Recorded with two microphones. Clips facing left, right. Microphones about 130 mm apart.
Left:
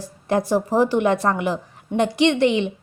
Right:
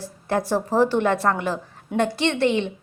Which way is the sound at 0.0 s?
15° left (ahead or behind).